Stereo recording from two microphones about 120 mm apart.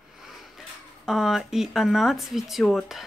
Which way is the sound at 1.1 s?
5° right (ahead or behind).